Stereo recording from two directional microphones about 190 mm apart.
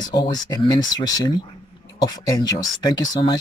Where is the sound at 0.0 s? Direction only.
20° left (ahead or behind).